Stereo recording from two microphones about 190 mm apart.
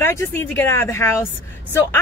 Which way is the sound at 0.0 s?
10° left (ahead or behind).